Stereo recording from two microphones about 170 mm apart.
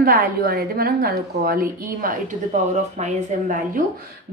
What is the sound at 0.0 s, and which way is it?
A woman's voice, 60° right (ahead or behind).